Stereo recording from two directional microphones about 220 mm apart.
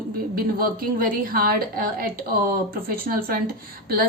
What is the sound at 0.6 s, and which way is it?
A woman's voice, 40° right (ahead or behind).